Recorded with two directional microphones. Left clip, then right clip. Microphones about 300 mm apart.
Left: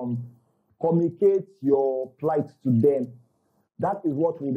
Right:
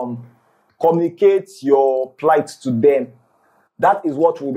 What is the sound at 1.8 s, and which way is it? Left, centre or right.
Speech, right.